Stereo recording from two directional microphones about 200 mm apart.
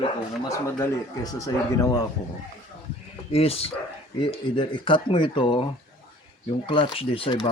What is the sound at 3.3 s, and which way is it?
Speech, 30° left (ahead or behind).